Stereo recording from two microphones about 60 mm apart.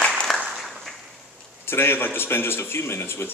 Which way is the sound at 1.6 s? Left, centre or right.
Left.